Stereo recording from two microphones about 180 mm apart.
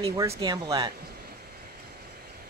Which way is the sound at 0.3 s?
25° right (ahead or behind).